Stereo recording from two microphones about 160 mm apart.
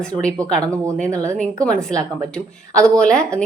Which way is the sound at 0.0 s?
5° left (ahead or behind).